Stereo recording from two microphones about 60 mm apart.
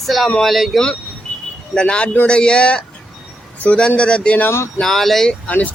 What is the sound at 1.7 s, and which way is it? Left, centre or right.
Speech, centre.